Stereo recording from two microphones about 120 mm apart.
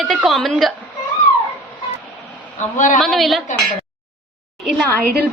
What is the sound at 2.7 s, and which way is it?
Speech, 90° left.